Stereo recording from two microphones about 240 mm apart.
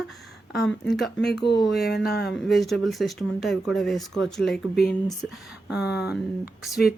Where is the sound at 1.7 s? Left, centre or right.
Left.